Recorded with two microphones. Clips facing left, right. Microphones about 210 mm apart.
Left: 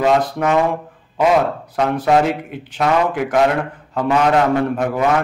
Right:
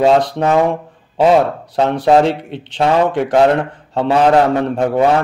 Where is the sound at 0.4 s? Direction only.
30° right (ahead or behind).